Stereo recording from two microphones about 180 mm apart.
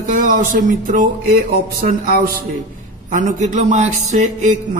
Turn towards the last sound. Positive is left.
turn(degrees=-40)  # may be behind; listen again after turning